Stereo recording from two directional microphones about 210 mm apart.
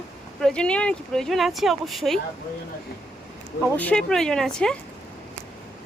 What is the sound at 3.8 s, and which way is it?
Speech, 5° left (ahead or behind).